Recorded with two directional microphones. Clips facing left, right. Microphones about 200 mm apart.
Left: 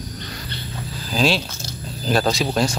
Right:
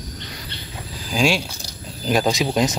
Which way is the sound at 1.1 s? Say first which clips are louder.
Even; 10° right (ahead or behind).